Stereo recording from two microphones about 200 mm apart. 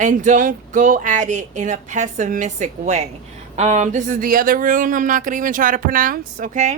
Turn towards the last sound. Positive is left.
turn(degrees=-35)  # may be behind; listen again after turning